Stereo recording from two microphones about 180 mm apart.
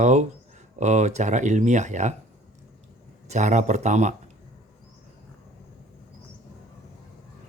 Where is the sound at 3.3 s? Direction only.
40° right (ahead or behind).